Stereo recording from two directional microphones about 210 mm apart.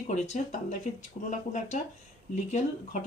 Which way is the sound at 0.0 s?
35° left (ahead or behind).